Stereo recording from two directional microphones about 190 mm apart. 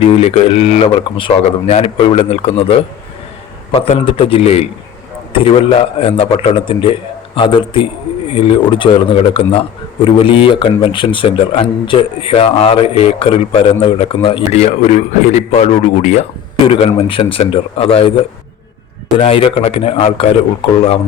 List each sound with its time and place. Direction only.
0.0 s a man's voice: 30° left (ahead or behind)
19.1 s a man's voice: 30° left (ahead or behind)